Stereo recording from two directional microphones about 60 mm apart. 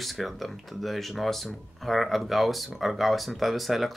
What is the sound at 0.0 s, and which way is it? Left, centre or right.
Speech, centre.